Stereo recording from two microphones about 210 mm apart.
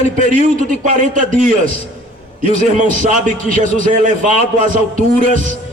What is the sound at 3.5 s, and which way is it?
Speech, 40° right (ahead or behind).